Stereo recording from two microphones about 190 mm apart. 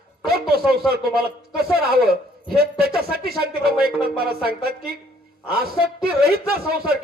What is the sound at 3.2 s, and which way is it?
A man's voice, 55° right (ahead or behind).